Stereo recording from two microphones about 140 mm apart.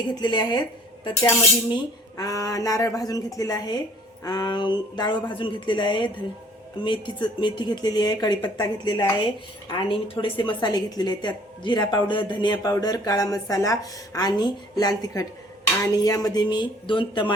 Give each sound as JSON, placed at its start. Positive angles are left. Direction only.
{"t": 0.2, "sound": "speech", "side_deg": 30}
{"t": 1.7, "sound": "a woman's voice", "side_deg": 25}